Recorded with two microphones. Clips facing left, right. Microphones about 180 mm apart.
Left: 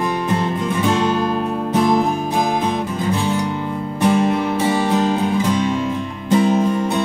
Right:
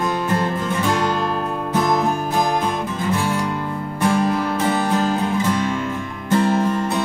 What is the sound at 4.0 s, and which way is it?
Music, 20° left (ahead or behind).